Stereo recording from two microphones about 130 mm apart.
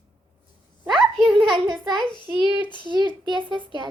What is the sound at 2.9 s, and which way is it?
A child's voice, 35° right (ahead or behind).